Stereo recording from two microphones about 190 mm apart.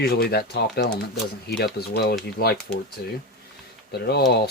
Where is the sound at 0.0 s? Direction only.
55° left (ahead or behind).